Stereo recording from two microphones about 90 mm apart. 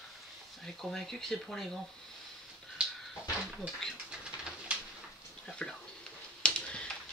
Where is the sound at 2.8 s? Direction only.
10° right (ahead or behind).